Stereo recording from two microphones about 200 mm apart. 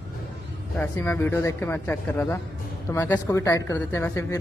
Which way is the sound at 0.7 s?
10° left (ahead or behind).